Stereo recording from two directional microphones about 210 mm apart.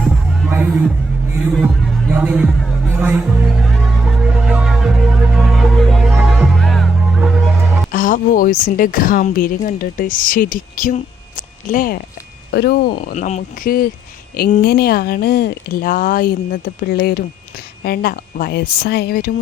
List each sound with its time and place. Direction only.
0.5 s hubbub: 10° right (ahead or behind)
1.5 s speech: centre (ahead or behind)
2.9 s speech: 10° right (ahead or behind)
3.6 s music: centre (ahead or behind)
7.9 s speech: 40° left (ahead or behind)
12.5 s speech: 50° left (ahead or behind)